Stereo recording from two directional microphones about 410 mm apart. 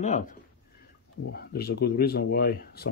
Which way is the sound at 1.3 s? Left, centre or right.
Left.